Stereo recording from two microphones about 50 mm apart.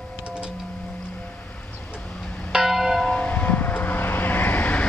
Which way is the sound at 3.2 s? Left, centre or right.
Left.